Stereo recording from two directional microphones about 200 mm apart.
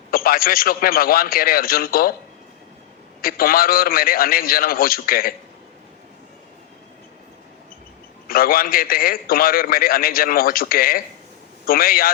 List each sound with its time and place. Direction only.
0.1 s a man's voice: 45° left (ahead or behind)
3.2 s a man's voice: 45° left (ahead or behind)
8.3 s a man's voice: 45° left (ahead or behind)